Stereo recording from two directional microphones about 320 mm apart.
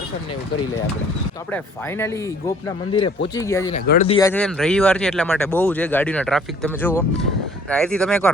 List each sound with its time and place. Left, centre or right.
1.5 s speech: centre
3.8 s speech: left; by 8.3 s centre